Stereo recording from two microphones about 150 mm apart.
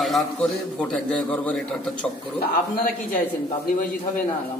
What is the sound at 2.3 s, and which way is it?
Speech, 80° left.